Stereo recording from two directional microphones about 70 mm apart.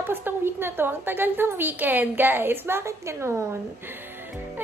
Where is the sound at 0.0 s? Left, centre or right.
Right.